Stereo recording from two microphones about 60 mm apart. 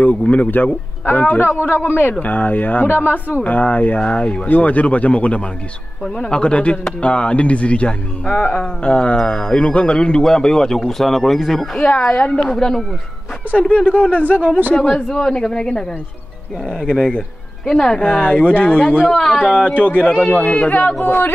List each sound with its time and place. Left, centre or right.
0.0 s a man's voice: left; by 11.7 s centre
11.7 s a man's voice: centre
12.4 s a man's voice: centre
13.5 s speech: left
15.0 s a man's voice: centre
16.8 s a man's voice: centre; by 21.3 s left